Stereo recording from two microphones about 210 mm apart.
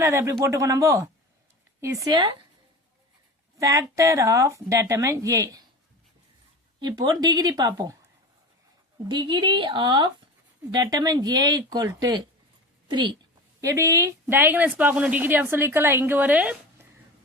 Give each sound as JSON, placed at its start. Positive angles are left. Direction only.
{"t": 0.0, "sound": "a woman's voice", "side_deg": -15}
{"t": 3.6, "sound": "a woman's voice", "side_deg": -15}
{"t": 6.7, "sound": "speech", "side_deg": -20}
{"t": 9.0, "sound": "a woman's voice", "side_deg": -25}